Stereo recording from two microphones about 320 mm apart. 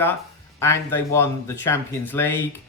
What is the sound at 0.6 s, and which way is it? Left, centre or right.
Speech, centre.